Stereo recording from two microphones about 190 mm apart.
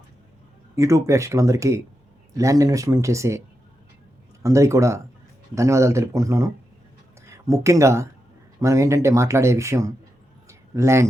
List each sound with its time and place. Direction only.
0.8 s speech: 15° right (ahead or behind)
4.4 s speech: 15° right (ahead or behind)